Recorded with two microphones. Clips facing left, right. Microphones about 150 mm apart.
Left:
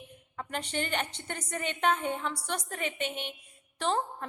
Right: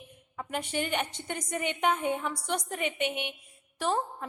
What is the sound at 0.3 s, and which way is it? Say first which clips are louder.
A woman's voice: right 2 dB; 10° right (ahead or behind).